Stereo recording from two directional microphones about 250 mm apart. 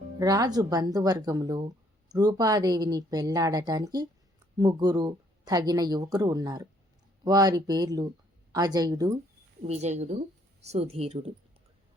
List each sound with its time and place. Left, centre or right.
0.2 s speech: centre
9.6 s speech: right